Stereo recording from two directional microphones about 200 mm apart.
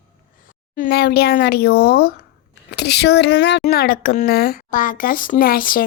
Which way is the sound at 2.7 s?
55° left (ahead or behind).